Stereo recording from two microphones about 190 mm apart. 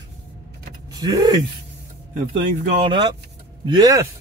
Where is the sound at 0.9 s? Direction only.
20° right (ahead or behind).